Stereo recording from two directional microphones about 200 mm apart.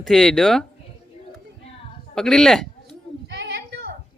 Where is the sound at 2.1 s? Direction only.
5° left (ahead or behind).